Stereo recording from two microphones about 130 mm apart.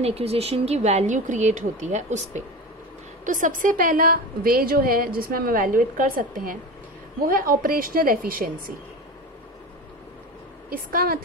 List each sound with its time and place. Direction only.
0.0 s a woman's voice: 50° right (ahead or behind)
3.3 s a woman's voice: 90° right
10.7 s a woman's voice: 90° right